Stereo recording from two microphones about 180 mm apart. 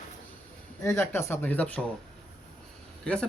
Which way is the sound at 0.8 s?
15° left (ahead or behind).